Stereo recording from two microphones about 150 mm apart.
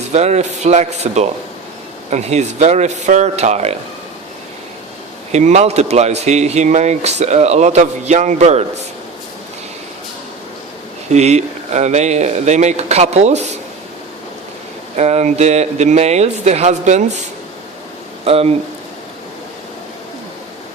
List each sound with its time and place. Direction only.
0.1 s speech: 50° right (ahead or behind)
5.3 s speech: 50° right (ahead or behind)
11.1 s speech: 50° right (ahead or behind)
14.9 s speech: 50° right (ahead or behind)
18.3 s speech: 40° right (ahead or behind)